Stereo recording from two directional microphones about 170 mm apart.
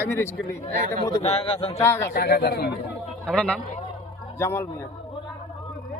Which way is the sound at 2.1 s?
70° left (ahead or behind).